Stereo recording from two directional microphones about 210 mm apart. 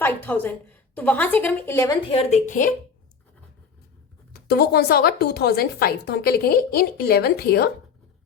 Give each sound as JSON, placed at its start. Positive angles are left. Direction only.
{"t": 0.0, "sound": "a woman's voice", "side_deg": 10}
{"t": 2.0, "sound": "a woman's voice", "side_deg": 30}
{"t": 4.3, "sound": "speech", "side_deg": 50}